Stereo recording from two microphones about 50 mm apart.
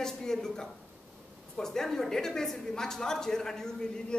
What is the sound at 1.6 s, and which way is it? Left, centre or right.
A woman's voice, centre.